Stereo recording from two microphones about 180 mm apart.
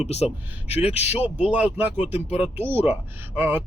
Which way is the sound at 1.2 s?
10° right (ahead or behind).